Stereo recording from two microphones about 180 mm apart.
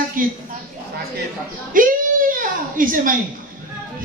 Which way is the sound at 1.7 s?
50° right (ahead or behind).